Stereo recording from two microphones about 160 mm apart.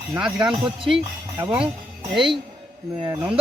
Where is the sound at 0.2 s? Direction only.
5° right (ahead or behind).